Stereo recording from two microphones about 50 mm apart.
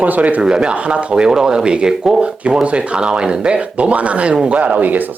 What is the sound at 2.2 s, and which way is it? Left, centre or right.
Speech, right.